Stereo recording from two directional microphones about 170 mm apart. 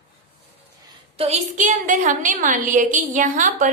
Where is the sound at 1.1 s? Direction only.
40° right (ahead or behind).